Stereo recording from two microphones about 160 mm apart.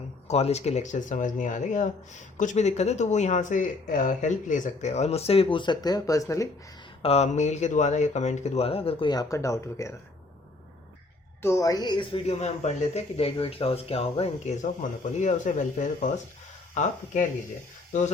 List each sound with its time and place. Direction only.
0.3 s speech: 45° left (ahead or behind); by 6.5 s 20° left (ahead or behind)
7.0 s speech: 40° left (ahead or behind); by 9.9 s 20° left (ahead or behind)
11.4 s a woman's voice: 20° left (ahead or behind); by 17.2 s 50° left (ahead or behind)